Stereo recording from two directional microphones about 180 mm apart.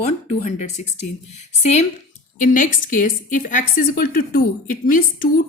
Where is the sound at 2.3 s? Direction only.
45° left (ahead or behind).